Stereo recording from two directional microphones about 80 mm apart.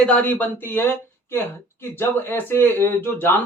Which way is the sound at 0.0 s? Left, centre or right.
Centre.